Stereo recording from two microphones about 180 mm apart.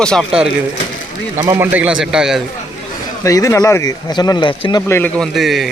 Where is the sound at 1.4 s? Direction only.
15° right (ahead or behind).